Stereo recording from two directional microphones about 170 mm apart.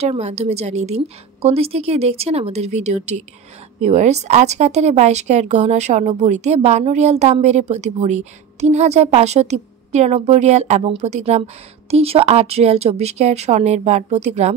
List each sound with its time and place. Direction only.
0.0 s a woman's voice: 40° right (ahead or behind)